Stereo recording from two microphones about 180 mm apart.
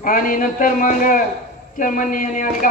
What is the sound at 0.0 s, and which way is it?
A man's voice, 50° left (ahead or behind).